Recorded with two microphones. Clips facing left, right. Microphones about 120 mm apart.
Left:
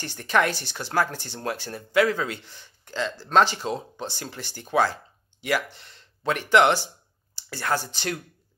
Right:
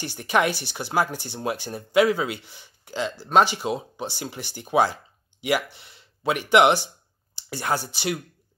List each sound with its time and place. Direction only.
0.0 s speech: 10° right (ahead or behind)